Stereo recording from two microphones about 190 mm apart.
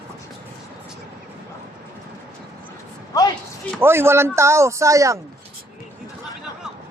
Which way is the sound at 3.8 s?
10° right (ahead or behind).